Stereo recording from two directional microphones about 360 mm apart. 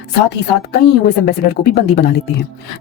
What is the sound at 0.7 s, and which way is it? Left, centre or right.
Speech, left.